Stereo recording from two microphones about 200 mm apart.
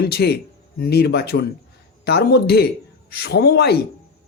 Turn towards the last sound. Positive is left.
turn(degrees=55)  # may be behind; listen again after turning